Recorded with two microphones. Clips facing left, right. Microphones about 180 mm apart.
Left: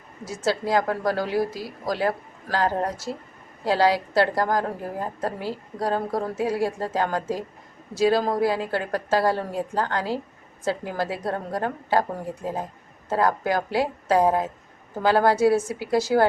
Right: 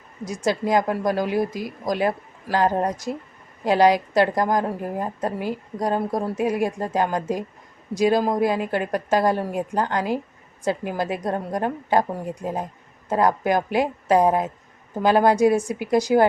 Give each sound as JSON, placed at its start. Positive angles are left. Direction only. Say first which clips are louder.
{"t": 0.3, "sound": "a woman's voice", "louder": "right 2 dB", "side_deg": -15}